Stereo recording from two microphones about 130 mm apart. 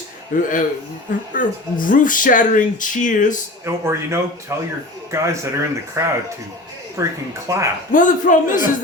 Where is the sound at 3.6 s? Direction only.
20° right (ahead or behind).